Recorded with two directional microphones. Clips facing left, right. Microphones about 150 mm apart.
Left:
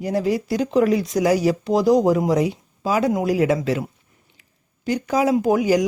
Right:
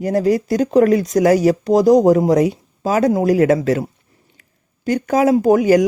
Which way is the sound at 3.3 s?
45° right (ahead or behind).